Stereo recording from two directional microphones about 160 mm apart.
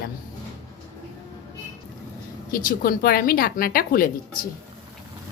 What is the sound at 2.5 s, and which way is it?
A woman's voice, 60° left (ahead or behind).